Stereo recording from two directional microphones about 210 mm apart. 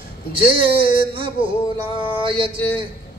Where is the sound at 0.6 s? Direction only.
25° right (ahead or behind).